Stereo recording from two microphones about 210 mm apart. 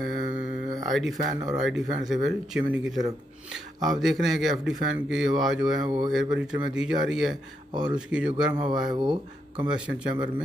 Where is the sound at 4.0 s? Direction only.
Centre (ahead or behind).